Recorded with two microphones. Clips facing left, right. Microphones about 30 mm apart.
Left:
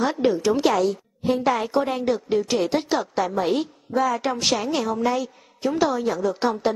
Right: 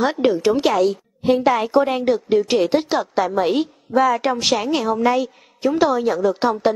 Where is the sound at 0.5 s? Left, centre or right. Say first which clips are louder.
Right 3 dB; centre.